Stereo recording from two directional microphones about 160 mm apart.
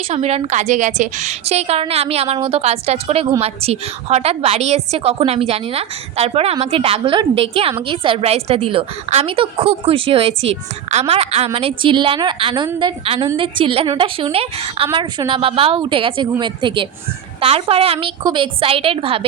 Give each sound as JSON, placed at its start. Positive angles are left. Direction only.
{"t": 0.1, "sound": "a woman's voice", "side_deg": -40}